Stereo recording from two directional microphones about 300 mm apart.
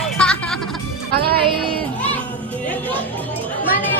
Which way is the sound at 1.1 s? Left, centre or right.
Right.